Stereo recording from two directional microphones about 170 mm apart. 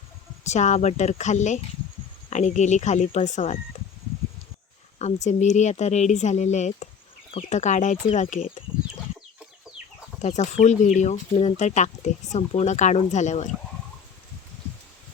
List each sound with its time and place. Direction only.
0.4 s speech: 45° left (ahead or behind)
4.9 s speech: 40° left (ahead or behind)
10.2 s speech: 40° left (ahead or behind)